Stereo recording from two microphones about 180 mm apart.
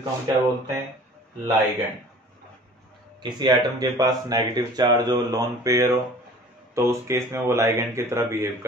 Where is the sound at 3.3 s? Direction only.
20° right (ahead or behind).